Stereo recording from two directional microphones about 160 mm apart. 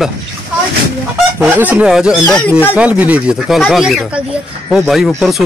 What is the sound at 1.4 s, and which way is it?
Speech, 10° right (ahead or behind).